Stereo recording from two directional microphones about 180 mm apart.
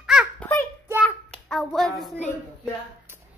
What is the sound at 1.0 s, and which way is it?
Hands, 5° left (ahead or behind).